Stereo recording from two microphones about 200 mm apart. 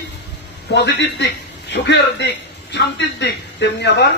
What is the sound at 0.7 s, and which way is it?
A man's voice, 60° left (ahead or behind).